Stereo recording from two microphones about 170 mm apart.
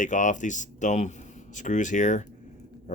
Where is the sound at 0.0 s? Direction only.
50° left (ahead or behind).